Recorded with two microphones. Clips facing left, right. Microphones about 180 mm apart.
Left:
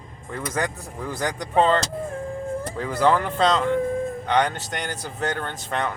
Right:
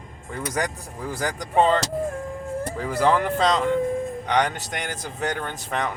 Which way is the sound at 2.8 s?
10° right (ahead or behind).